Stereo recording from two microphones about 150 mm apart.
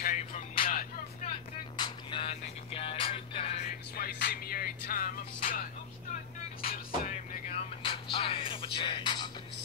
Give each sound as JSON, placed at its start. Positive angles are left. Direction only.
{"t": 0.1, "sound": "music", "side_deg": 40}
{"t": 0.7, "sound": "music", "side_deg": 60}
{"t": 1.8, "sound": "music", "side_deg": 35}
{"t": 3.9, "sound": "music", "side_deg": 90}
{"t": 6.6, "sound": "music", "side_deg": 75}
{"t": 7.4, "sound": "music", "side_deg": 40}